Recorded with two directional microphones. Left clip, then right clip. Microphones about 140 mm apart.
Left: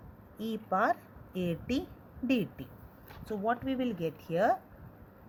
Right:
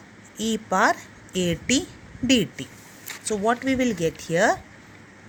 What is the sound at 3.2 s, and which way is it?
Speech, 40° right (ahead or behind).